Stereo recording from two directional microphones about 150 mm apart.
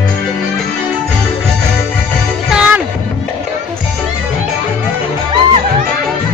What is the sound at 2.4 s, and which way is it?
Music, 5° right (ahead or behind).